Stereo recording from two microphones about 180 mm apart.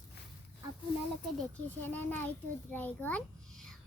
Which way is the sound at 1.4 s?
10° left (ahead or behind).